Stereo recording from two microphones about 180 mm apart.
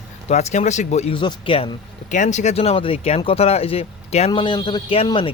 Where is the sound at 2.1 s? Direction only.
40° left (ahead or behind).